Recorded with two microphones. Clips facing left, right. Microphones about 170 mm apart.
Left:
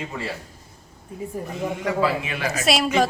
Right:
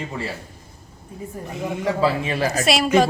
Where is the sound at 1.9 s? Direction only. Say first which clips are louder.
Right 3 dB; 30° right (ahead or behind).